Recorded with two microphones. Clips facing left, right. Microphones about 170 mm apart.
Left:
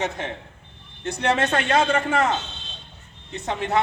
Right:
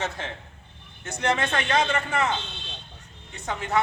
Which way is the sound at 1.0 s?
40° left (ahead or behind).